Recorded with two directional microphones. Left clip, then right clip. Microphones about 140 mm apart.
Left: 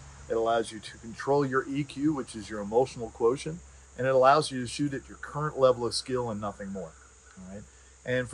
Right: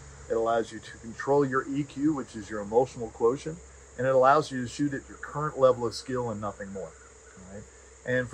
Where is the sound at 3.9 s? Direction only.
15° left (ahead or behind).